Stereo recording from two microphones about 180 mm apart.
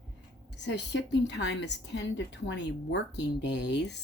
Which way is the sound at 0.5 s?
75° left (ahead or behind).